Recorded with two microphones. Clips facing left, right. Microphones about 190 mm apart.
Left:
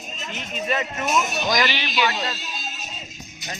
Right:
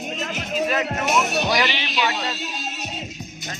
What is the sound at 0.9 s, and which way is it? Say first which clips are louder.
Speech: right 2 dB; 70° right (ahead or behind).